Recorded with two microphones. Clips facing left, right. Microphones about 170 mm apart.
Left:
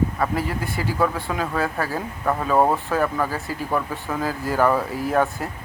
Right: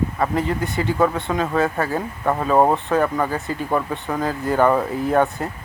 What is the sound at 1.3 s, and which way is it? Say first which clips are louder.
Speech: right 4 dB; 5° left (ahead or behind).